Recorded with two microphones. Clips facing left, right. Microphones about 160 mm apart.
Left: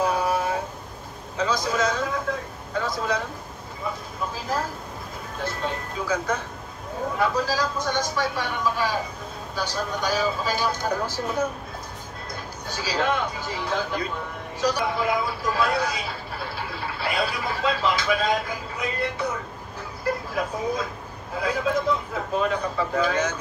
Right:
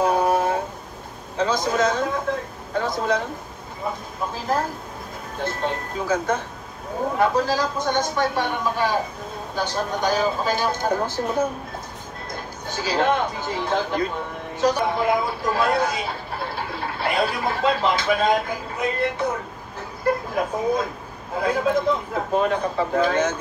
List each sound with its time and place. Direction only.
0.0 s a sound: 50° right (ahead or behind)
1.4 s a man's voice: 50° right (ahead or behind)
5.4 s speech: 50° right (ahead or behind)
12.3 s speech: 50° right (ahead or behind)
20.3 s speech: 50° right (ahead or behind)